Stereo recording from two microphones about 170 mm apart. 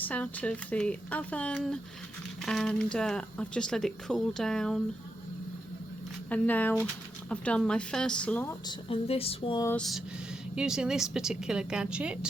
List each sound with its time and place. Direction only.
0.0 s speech: 10° left (ahead or behind)
6.3 s speech: 10° left (ahead or behind)
8.6 s speech: 35° left (ahead or behind)
9.7 s speech: centre (ahead or behind)